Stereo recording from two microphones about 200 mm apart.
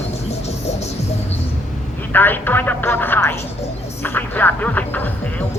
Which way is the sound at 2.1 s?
10° left (ahead or behind).